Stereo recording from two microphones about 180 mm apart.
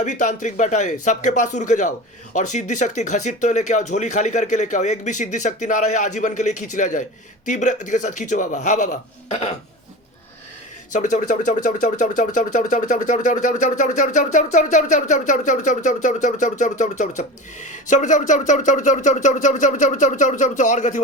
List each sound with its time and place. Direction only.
0.0 s speech: 45° left (ahead or behind)
10.9 s speech: 45° left (ahead or behind)